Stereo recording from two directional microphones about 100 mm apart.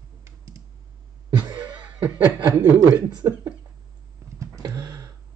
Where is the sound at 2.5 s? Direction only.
30° right (ahead or behind).